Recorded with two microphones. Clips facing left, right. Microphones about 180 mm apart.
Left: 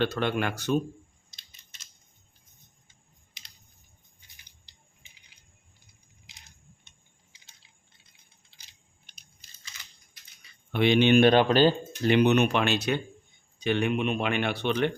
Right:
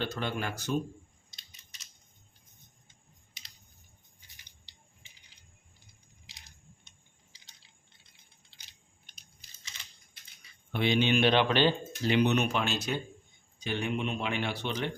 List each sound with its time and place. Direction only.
0.0 s speech: 70° left (ahead or behind)
9.7 s a sound: 25° right (ahead or behind)
10.7 s speech: 70° left (ahead or behind); by 11.7 s 40° left (ahead or behind)
12.0 s speech: 60° left (ahead or behind)